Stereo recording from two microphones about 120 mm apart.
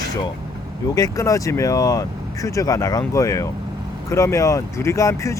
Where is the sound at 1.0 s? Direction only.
30° left (ahead or behind).